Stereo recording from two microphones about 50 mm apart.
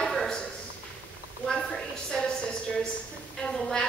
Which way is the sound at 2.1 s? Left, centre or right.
Centre.